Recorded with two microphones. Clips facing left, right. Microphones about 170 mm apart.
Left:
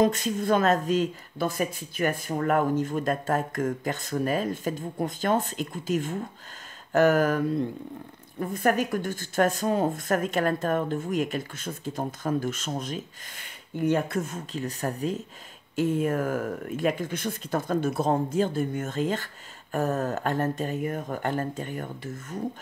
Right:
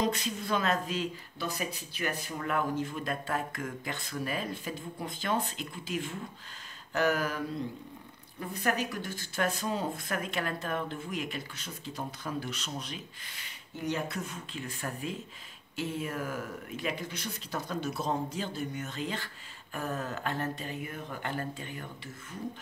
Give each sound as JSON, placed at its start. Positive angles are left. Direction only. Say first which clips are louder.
{"t": 0.0, "sound": "speech", "louder": "left 8 dB", "side_deg": 50}